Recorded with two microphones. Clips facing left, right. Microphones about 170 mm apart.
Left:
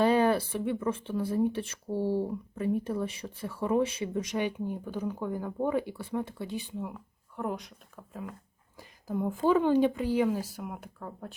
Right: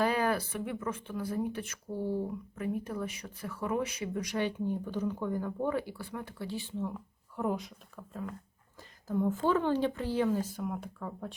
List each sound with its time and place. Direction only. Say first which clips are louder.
0.0 s speech: left 5 dB; 25° left (ahead or behind)
6.9 s speech: right 1 dB; centre (ahead or behind)